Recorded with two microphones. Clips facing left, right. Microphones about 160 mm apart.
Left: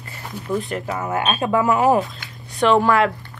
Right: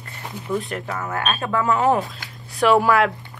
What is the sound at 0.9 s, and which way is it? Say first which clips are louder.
Speech: left 3 dB; 20° left (ahead or behind).